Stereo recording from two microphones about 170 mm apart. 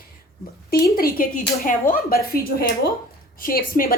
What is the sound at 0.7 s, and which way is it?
A woman's voice, 65° left (ahead or behind).